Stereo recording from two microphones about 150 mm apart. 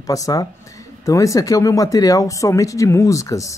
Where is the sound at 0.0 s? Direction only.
25° left (ahead or behind).